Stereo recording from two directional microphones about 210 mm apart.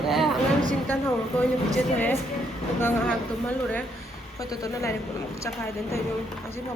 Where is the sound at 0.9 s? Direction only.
10° left (ahead or behind).